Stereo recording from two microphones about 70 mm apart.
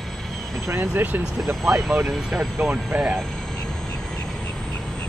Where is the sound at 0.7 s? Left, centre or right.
Right.